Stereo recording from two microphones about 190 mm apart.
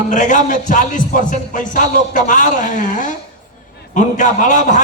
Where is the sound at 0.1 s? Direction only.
40° left (ahead or behind).